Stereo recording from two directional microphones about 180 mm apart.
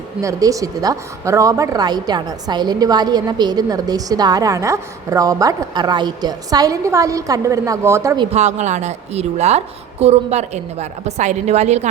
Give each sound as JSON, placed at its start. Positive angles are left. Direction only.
{"t": 0.2, "sound": "a woman's voice", "side_deg": -20}
{"t": 8.3, "sound": "a woman's voice", "side_deg": -40}